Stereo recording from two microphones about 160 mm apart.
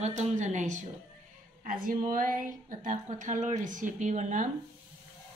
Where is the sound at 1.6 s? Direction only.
60° right (ahead or behind).